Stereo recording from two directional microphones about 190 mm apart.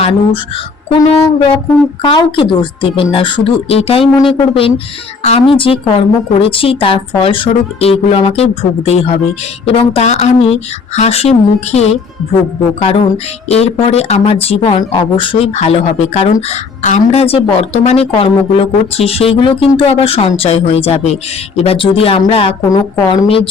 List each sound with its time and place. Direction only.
0.5 s speech: 30° left (ahead or behind)